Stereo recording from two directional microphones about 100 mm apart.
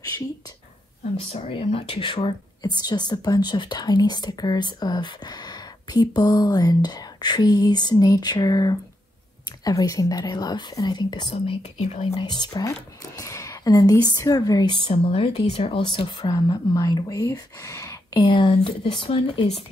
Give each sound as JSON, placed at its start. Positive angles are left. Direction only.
{"t": 1.3, "sound": "speech", "side_deg": 75}
{"t": 2.0, "sound": "speech", "side_deg": 50}
{"t": 11.3, "sound": "speech", "side_deg": 80}
{"t": 12.2, "sound": "speech", "side_deg": 50}
{"t": 14.9, "sound": "speech", "side_deg": 85}
{"t": 15.8, "sound": "speech", "side_deg": 50}
{"t": 18.1, "sound": "speech", "side_deg": 55}